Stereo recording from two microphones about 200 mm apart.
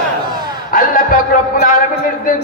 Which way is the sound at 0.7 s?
45° left (ahead or behind).